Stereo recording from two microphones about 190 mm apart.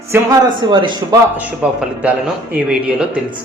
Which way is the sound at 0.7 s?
25° right (ahead or behind).